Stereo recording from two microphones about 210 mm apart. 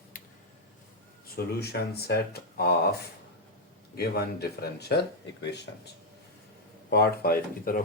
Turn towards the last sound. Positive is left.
turn(degrees=45)  # may be behind; listen again after turning